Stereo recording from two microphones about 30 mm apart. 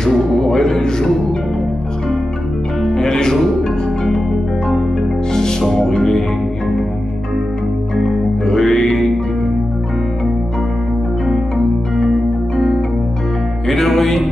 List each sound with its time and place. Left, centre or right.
0.2 s music: centre
2.8 s music: centre
5.3 s music: left
7.9 s music: centre
11.2 s music: centre
13.7 s music: centre